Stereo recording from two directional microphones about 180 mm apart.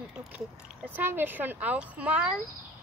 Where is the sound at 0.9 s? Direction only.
10° right (ahead or behind).